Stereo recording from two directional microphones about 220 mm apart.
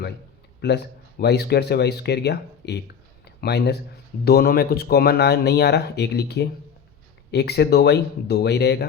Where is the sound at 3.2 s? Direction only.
50° left (ahead or behind).